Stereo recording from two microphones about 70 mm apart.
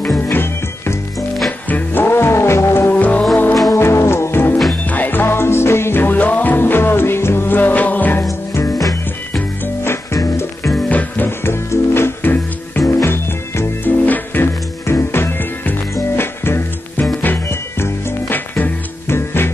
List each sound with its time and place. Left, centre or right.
0.3 s music: left
3.7 s music: left
8.2 s music: left
10.9 s music: left
11.2 s music: left
13.8 s music: left